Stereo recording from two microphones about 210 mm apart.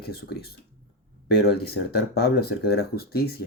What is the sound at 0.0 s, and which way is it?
Speech, 50° left (ahead or behind).